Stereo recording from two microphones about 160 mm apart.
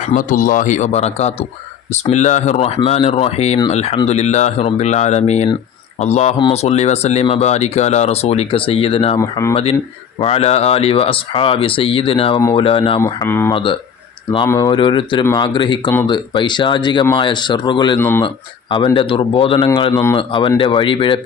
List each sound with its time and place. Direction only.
0.1 s speech: 55° left (ahead or behind); by 9.1 s 35° left (ahead or behind)
9.1 s speech: 20° left (ahead or behind)
10.2 s speech: 40° left (ahead or behind)
13.0 s speech: 15° left (ahead or behind)
13.5 s speech: 30° left (ahead or behind)
19.9 s speech: 15° left (ahead or behind)
20.1 s speech: 30° left (ahead or behind)